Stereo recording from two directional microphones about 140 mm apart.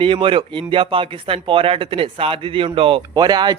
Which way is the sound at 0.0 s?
40° right (ahead or behind).